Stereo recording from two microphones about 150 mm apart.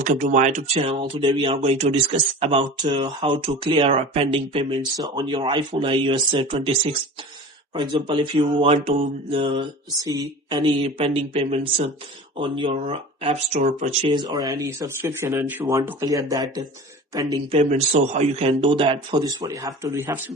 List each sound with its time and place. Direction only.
0.0 s speech: 55° right (ahead or behind)
13.6 s speech: 55° right (ahead or behind)
14.1 s speech: 30° right (ahead or behind)
17.6 s speech: 50° right (ahead or behind); by 20.1 s 20° right (ahead or behind)